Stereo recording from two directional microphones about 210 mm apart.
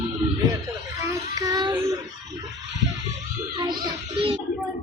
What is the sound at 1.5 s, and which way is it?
Child singing, 20° right (ahead or behind).